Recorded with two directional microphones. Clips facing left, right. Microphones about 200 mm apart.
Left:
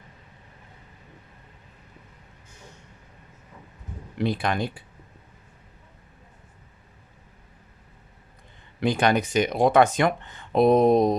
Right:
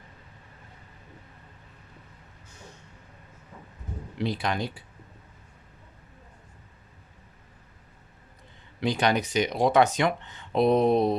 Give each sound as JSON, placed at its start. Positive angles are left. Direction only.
{"t": 4.2, "sound": "speech", "side_deg": 55}
{"t": 8.8, "sound": "speech", "side_deg": 50}